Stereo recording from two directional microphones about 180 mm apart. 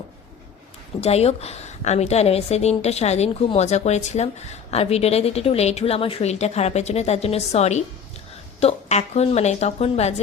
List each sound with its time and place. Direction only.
1.0 s a woman's voice: 35° left (ahead or behind)